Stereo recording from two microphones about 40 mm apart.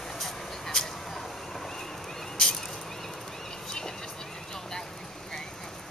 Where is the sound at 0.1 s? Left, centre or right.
Centre.